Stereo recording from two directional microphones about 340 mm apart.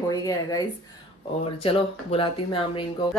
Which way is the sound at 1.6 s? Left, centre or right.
Centre.